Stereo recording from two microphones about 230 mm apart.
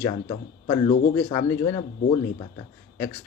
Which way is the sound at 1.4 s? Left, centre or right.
Centre.